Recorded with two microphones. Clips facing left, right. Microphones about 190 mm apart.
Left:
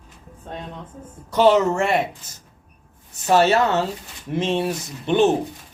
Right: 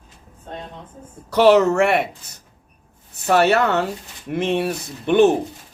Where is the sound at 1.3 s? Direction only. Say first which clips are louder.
Right 3 dB; 70° right (ahead or behind).